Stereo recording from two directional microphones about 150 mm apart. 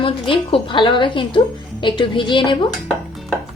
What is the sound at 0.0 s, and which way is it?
A woman's voice, 35° left (ahead or behind).